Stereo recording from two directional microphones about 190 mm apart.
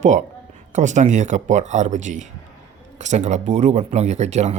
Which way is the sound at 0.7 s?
40° right (ahead or behind).